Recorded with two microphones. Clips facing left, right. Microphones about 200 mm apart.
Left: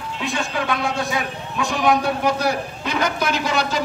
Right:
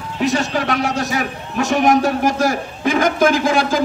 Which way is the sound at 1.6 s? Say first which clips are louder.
Right 5 dB; 45° right (ahead or behind).